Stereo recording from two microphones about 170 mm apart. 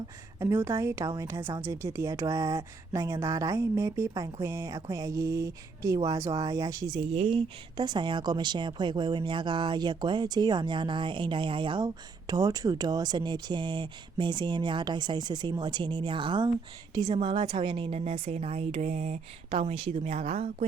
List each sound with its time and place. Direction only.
0.3 s a woman's voice: 15° right (ahead or behind); by 20.7 s 35° right (ahead or behind)